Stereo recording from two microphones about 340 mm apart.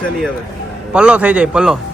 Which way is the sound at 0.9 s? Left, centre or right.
Centre.